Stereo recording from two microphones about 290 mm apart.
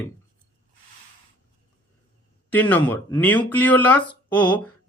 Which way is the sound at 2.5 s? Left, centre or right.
Centre.